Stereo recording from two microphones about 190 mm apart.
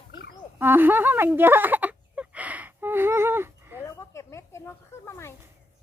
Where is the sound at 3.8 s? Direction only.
15° left (ahead or behind).